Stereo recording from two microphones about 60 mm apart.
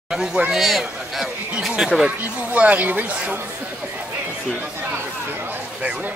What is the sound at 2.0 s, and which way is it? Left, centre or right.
Speech, right.